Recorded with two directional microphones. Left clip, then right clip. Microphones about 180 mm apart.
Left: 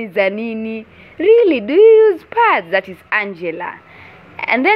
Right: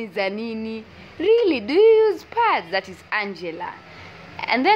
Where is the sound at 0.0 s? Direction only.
20° left (ahead or behind).